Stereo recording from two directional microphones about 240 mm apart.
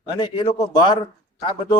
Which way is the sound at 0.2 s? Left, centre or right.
Left.